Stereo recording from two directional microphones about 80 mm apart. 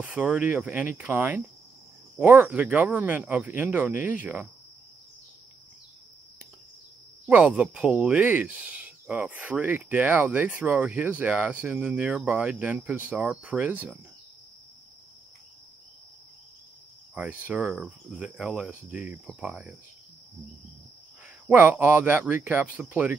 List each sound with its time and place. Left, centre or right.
0.0 s speech: right
7.2 s speech: centre
17.1 s speech: centre
21.5 s speech: centre